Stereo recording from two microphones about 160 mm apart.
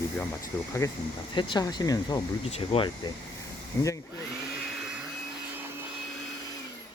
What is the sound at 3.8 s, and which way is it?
Speech, 20° left (ahead or behind).